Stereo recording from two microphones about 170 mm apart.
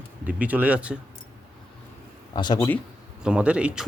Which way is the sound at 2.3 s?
25° left (ahead or behind).